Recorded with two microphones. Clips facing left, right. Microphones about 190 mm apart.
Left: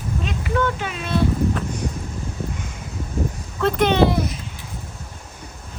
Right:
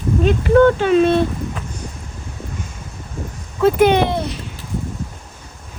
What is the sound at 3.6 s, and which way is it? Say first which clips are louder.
Speech: right 4 dB; 5° right (ahead or behind).